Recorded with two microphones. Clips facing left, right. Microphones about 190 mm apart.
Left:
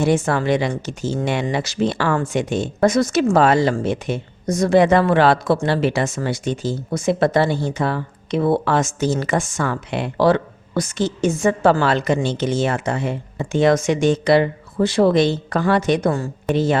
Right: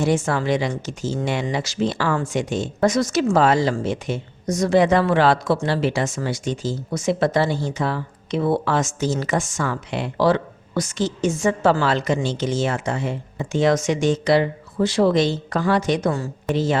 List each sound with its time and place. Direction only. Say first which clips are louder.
0.0 s speech: left 2 dB; 60° left (ahead or behind)